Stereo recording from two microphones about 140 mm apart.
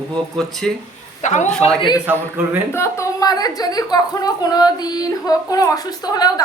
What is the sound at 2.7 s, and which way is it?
A woman's voice, 20° left (ahead or behind).